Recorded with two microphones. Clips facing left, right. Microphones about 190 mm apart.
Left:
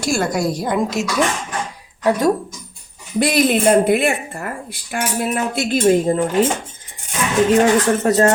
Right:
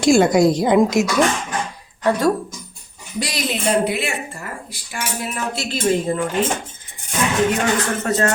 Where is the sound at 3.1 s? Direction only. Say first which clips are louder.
Left 9 dB; 55° left (ahead or behind).